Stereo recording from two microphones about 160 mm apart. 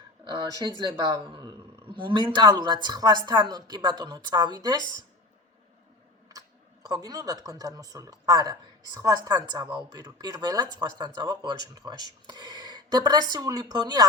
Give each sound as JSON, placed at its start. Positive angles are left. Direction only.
{"t": 0.3, "sound": "a sound", "side_deg": -25}
{"t": 0.8, "sound": "speech", "side_deg": -25}
{"t": 6.8, "sound": "speech", "side_deg": -25}